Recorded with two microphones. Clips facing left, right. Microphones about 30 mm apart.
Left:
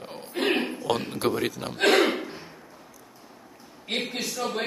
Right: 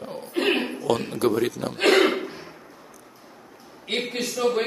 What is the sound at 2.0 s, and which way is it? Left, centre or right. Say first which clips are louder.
Throat clearing: right 3 dB; centre.